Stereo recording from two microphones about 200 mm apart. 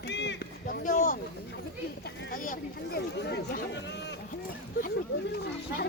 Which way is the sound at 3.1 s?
55° left (ahead or behind).